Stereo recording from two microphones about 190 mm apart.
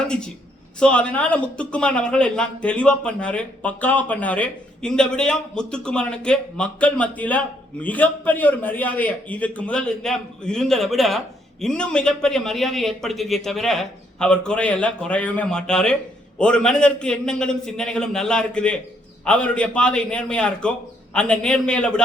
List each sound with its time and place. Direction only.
0.8 s a man's voice: 5° left (ahead or behind)